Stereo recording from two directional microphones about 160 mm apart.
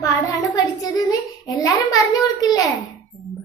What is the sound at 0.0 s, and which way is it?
Child singing, 20° left (ahead or behind).